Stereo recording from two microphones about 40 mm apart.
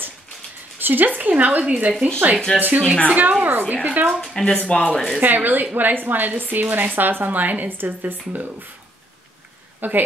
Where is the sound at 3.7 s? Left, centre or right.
Right.